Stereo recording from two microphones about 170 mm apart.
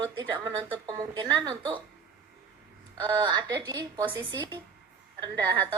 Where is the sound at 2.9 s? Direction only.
25° right (ahead or behind).